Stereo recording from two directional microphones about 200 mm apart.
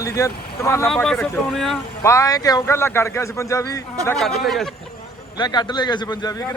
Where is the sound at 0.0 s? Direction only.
15° left (ahead or behind).